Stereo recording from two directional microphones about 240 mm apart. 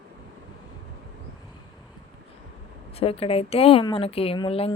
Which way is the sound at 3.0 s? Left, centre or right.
Left.